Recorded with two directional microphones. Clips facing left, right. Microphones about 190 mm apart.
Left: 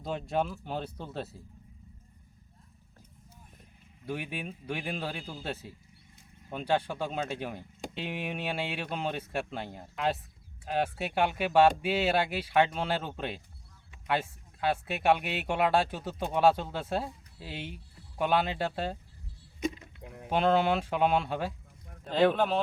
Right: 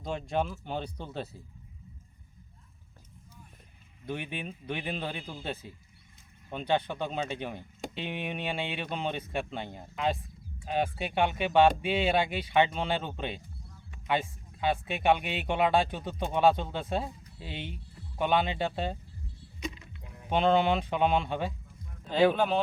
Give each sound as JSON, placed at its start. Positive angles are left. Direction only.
{"t": 0.0, "sound": "speech", "side_deg": 0}
{"t": 4.0, "sound": "speech", "side_deg": 5}
{"t": 19.5, "sound": "a sound", "side_deg": 45}
{"t": 20.3, "sound": "speech", "side_deg": 5}